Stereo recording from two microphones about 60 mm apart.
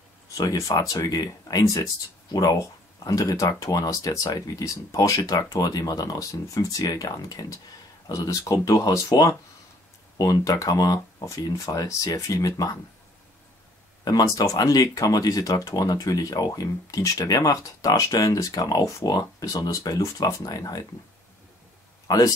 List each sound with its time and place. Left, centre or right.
0.3 s speech: left
3.0 s speech: left
8.1 s speech: left
14.0 s speech: left
22.0 s a sound: left